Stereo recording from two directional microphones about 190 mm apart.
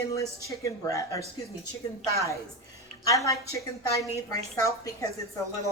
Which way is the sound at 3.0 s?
15° left (ahead or behind).